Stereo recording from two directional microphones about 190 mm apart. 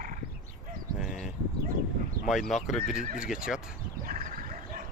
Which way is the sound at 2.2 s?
Centre (ahead or behind).